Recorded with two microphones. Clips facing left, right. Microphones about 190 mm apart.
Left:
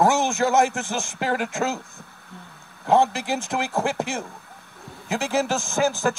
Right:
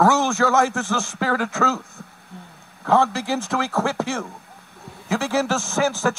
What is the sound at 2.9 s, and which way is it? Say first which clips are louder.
A man's voice: even; 20° left (ahead or behind).